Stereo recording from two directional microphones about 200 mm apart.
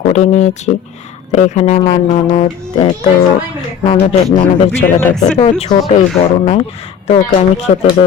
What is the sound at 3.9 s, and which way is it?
Speech, 30° left (ahead or behind).